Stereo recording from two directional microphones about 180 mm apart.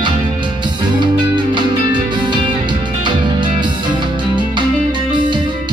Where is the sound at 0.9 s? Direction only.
25° right (ahead or behind).